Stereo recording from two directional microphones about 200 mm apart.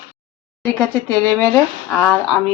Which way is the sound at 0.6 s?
10° left (ahead or behind).